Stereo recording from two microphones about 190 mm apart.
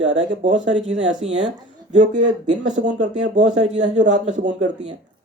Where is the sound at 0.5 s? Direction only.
75° right (ahead or behind).